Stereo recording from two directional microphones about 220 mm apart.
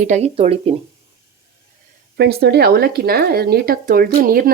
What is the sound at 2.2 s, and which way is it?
Speech, 50° right (ahead or behind).